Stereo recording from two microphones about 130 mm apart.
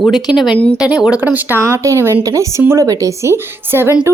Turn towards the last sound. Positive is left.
turn(degrees=-20)  # may be behind; listen again after turning